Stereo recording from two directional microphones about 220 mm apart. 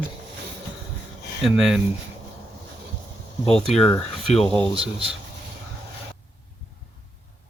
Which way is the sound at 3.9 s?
30° left (ahead or behind).